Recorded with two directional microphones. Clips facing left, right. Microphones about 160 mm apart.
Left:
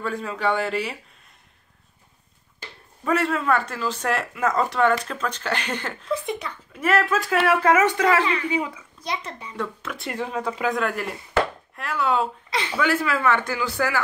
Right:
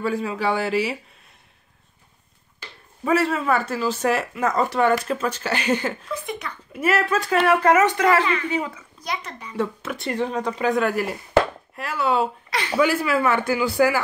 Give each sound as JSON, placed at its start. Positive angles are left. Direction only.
{"t": 0.0, "sound": "speech", "side_deg": -5}
{"t": 3.1, "sound": "a child's voice", "side_deg": -5}
{"t": 9.0, "sound": "a child's voice", "side_deg": 25}
{"t": 9.6, "sound": "speech", "side_deg": -5}
{"t": 12.4, "sound": "a sound", "side_deg": 25}
{"t": 12.8, "sound": "speech", "side_deg": -10}